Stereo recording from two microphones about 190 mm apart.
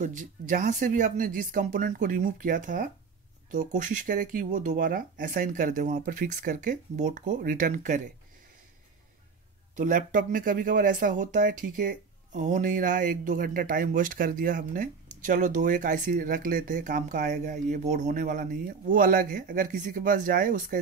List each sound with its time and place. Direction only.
0.0 s speech: 40° right (ahead or behind)
9.8 s speech: 45° right (ahead or behind)